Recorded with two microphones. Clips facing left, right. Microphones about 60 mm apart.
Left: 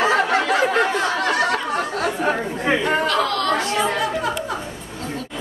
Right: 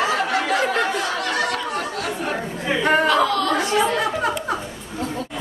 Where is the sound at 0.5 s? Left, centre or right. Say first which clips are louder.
Left 2 dB; left.